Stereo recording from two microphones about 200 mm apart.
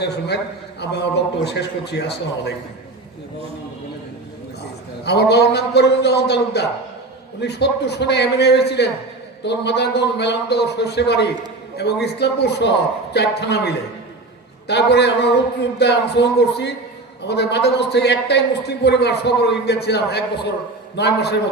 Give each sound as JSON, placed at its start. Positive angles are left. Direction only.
{"t": 0.8, "sound": "a man's voice", "side_deg": 55}
{"t": 5.0, "sound": "a man's voice", "side_deg": 55}